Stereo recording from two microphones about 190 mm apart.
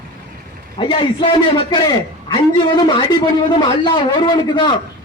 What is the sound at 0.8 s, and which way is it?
Speech, 25° left (ahead or behind).